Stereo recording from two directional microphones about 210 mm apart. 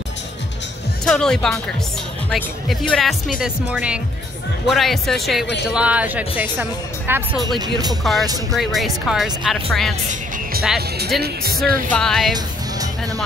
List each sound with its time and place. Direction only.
1.0 s speech: 5° left (ahead or behind)
7.4 s speech: 20° right (ahead or behind)
8.0 s speech: centre (ahead or behind)
11.1 s speech: 50° right (ahead or behind)
11.9 s speech: 5° left (ahead or behind)
12.4 s music: 15° right (ahead or behind)